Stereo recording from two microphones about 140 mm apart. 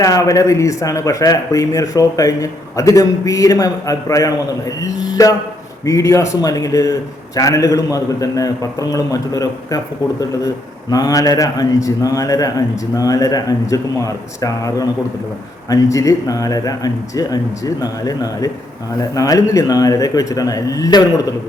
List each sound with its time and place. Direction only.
0.0 s a man's voice: 25° left (ahead or behind)